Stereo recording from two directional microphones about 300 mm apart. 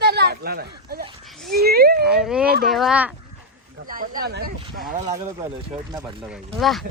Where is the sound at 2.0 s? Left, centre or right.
Centre.